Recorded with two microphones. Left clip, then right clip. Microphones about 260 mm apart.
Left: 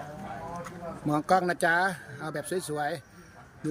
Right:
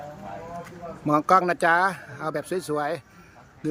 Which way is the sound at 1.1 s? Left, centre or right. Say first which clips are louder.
Right 6 dB; centre.